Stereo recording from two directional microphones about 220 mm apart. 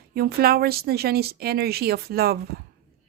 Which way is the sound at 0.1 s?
45° right (ahead or behind).